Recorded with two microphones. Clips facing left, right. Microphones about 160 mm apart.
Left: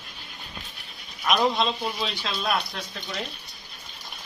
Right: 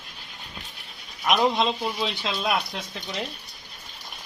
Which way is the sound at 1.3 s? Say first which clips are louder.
Right 1 dB; 15° right (ahead or behind).